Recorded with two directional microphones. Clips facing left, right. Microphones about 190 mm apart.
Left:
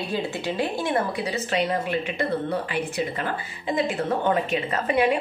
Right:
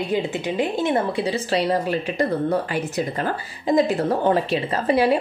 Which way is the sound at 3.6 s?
40° right (ahead or behind).